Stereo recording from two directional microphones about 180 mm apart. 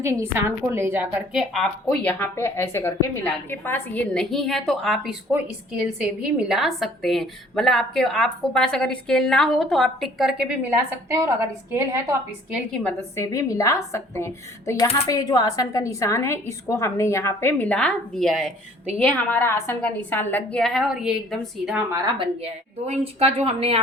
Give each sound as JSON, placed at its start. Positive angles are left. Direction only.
{"t": 0.0, "sound": "a woman's voice", "side_deg": -15}
{"t": 12.5, "sound": "a woman's voice", "side_deg": 5}
{"t": 13.1, "sound": "a woman's voice", "side_deg": 15}
{"t": 21.9, "sound": "a woman's voice", "side_deg": -25}
{"t": 22.9, "sound": "a woman's voice", "side_deg": -35}